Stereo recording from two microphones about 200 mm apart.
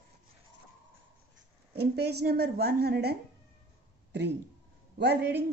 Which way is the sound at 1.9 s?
55° right (ahead or behind).